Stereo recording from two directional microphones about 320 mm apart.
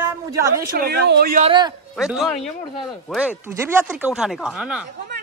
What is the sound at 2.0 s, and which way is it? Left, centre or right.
Speech, centre.